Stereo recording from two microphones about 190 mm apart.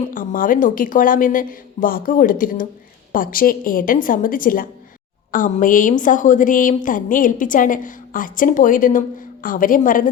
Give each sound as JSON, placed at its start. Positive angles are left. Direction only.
{"t": 0.1, "sound": "a woman's voice", "side_deg": 45}